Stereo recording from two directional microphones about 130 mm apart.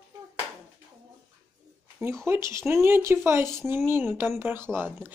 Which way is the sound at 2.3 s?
20° right (ahead or behind).